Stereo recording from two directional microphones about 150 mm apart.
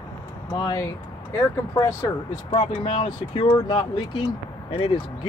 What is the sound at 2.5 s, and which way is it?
Speech, 35° left (ahead or behind).